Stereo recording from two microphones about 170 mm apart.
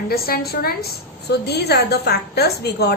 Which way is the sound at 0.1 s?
65° left (ahead or behind).